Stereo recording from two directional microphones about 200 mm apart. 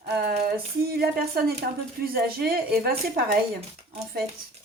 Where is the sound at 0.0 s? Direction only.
50° right (ahead or behind).